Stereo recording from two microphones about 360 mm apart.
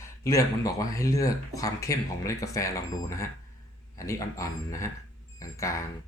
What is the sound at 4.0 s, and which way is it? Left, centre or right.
Speech, centre.